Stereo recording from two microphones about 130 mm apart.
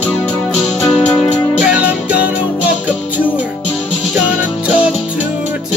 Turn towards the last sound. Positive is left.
turn(degrees=-10)  # may be behind; listen again after turning